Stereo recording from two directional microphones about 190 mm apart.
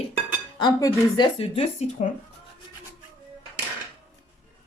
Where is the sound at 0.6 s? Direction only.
25° left (ahead or behind).